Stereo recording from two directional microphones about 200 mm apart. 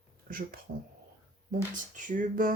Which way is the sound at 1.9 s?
40° right (ahead or behind).